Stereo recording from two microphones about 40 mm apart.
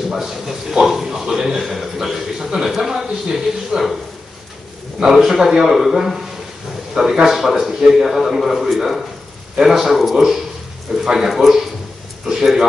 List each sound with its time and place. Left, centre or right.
0.1 s a man's voice: centre
5.0 s a man's voice: centre